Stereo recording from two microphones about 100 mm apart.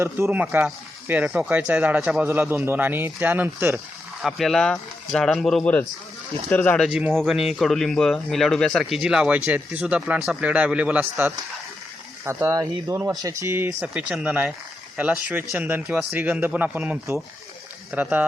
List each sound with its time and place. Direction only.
0.0 s speech: 25° right (ahead or behind)
4.2 s speech: centre (ahead or behind)
6.5 s speech: 20° left (ahead or behind)
7.1 s speech: 5° left (ahead or behind); by 11.3 s 15° right (ahead or behind)
12.2 s speech: 25° right (ahead or behind)
13.9 s speech: 10° right (ahead or behind)